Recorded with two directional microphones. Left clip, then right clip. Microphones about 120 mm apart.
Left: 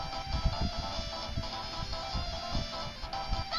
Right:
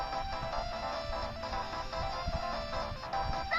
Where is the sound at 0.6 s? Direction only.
50° right (ahead or behind).